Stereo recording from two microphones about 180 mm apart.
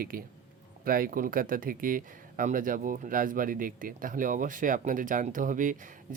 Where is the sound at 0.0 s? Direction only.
55° right (ahead or behind).